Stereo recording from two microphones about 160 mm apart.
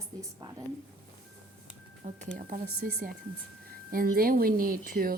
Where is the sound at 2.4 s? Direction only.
60° right (ahead or behind).